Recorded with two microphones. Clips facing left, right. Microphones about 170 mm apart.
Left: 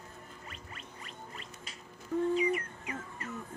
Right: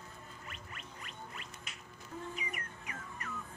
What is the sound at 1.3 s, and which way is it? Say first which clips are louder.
Music: left 2 dB; 35° left (ahead or behind).